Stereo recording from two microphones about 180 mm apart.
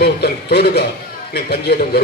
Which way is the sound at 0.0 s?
65° left (ahead or behind).